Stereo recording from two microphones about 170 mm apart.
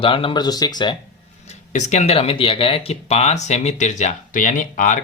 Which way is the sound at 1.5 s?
40° left (ahead or behind).